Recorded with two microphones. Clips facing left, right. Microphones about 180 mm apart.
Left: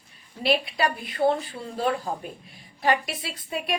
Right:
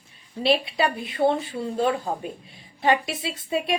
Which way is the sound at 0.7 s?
25° right (ahead or behind).